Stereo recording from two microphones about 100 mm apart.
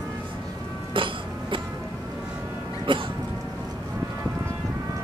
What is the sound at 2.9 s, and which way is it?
Music, 60° right (ahead or behind).